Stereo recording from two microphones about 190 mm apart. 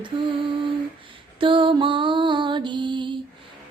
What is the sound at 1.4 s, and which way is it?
Music, 25° right (ahead or behind).